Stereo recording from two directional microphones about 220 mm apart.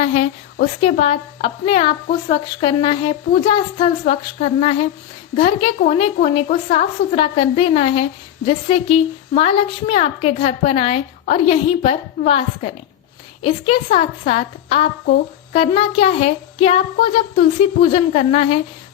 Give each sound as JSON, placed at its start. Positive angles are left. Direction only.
{"t": 0.0, "sound": "a woman's voice", "side_deg": 30}
{"t": 14.0, "sound": "a woman's voice", "side_deg": 30}